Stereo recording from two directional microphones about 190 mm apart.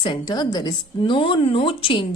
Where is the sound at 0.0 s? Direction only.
25° left (ahead or behind).